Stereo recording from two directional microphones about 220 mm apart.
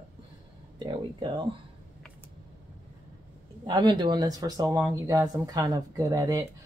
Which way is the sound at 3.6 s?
20° right (ahead or behind).